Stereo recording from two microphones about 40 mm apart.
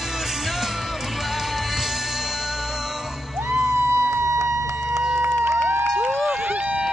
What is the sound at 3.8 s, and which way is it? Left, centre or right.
Music, right.